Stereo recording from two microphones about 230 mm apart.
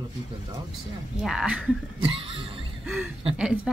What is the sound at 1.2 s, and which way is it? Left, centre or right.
Speech, centre.